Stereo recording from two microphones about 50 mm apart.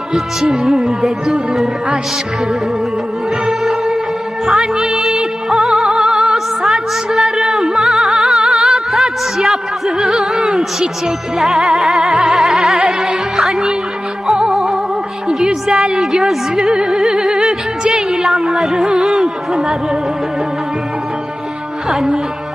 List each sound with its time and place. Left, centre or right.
0.1 s music: centre
3.4 s music: centre
10.6 s music: centre
19.0 s a sound: centre
21.8 s music: centre